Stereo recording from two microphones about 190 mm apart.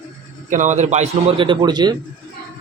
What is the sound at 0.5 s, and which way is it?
A man's voice, 40° right (ahead or behind).